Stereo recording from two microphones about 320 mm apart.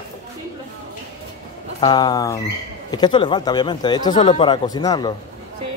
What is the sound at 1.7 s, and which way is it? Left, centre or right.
Speech, centre.